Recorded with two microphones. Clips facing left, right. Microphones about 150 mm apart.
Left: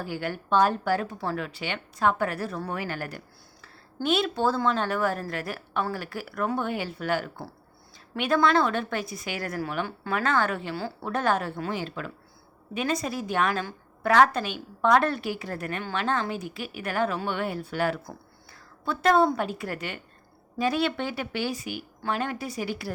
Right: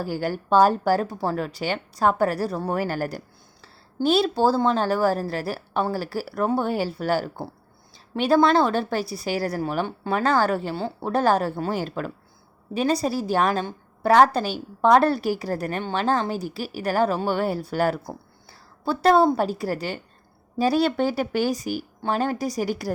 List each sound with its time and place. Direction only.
0.0 s a woman's voice: 40° right (ahead or behind)